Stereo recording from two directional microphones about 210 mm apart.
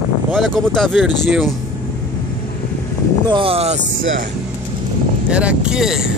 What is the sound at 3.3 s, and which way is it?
Speech, 25° right (ahead or behind).